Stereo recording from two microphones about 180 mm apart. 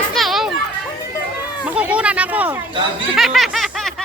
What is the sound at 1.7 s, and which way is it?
Speech, 10° right (ahead or behind).